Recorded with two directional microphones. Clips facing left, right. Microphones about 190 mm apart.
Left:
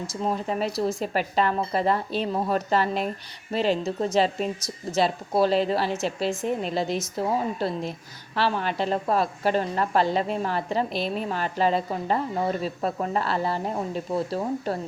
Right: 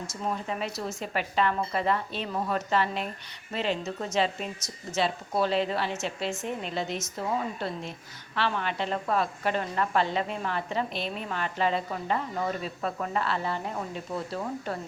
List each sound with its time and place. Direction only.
0.1 s a woman's voice: 35° left (ahead or behind)